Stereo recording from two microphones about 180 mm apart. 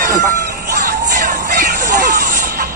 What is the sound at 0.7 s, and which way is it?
Music, 45° right (ahead or behind).